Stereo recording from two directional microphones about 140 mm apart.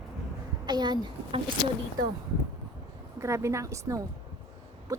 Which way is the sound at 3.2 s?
20° right (ahead or behind).